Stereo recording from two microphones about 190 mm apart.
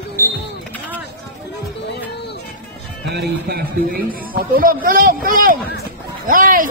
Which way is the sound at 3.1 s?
55° right (ahead or behind).